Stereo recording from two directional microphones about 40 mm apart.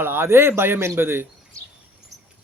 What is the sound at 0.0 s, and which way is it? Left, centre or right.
Speech, right.